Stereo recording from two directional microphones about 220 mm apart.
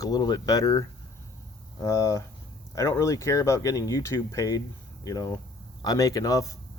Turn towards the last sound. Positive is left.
turn(degrees=15)  # may be behind; listen again after turning